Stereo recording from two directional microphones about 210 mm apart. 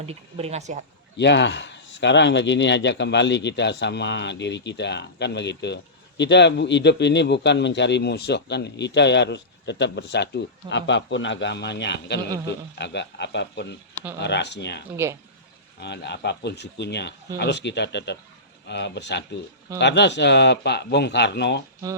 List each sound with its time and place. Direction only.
0.0 s speech: 30° right (ahead or behind)
1.1 s speech: 55° left (ahead or behind)
14.9 s speech: 10° right (ahead or behind)
15.8 s speech: 55° left (ahead or behind)